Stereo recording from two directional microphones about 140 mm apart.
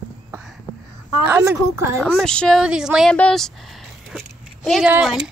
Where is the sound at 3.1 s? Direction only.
5° left (ahead or behind).